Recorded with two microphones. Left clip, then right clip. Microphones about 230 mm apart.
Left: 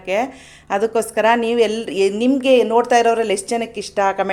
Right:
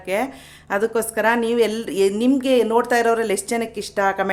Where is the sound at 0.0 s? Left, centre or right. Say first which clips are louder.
Left 3 dB; centre.